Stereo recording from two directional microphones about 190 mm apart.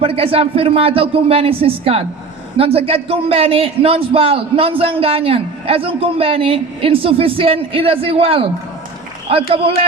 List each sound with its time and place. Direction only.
0.0 s a man's voice: 30° right (ahead or behind)
9.5 s a man's voice: 30° right (ahead or behind)